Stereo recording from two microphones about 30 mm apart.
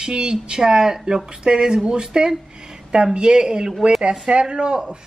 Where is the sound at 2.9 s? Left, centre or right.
Right.